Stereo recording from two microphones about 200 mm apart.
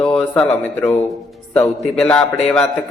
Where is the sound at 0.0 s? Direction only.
5° left (ahead or behind).